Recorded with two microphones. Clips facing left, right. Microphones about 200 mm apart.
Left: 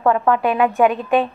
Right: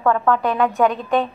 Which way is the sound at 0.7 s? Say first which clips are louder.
Left 2 dB; centre (ahead or behind).